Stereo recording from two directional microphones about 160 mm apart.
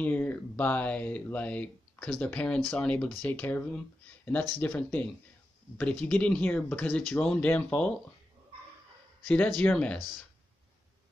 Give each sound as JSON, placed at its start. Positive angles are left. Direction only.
{"t": 0.0, "sound": "speech", "side_deg": 10}
{"t": 9.6, "sound": "speech", "side_deg": 10}